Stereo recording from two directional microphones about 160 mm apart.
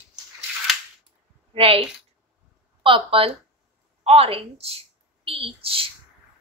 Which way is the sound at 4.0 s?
35° right (ahead or behind).